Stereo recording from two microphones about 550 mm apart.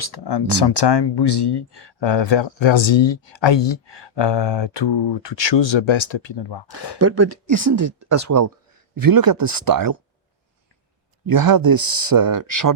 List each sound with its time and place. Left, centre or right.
0.0 s speech: left
7.0 s speech: right
11.3 s speech: right